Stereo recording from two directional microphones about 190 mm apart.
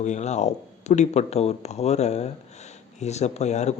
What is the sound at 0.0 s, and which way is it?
Speech, 40° left (ahead or behind).